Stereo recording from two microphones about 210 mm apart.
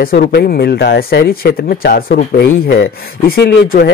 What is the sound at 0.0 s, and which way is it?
Speech, 45° left (ahead or behind).